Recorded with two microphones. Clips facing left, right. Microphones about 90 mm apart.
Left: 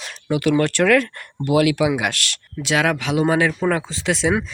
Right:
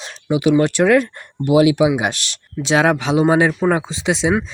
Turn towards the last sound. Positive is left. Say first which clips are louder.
# right 2 dB
turn(degrees=-20)  # may be behind; listen again after turning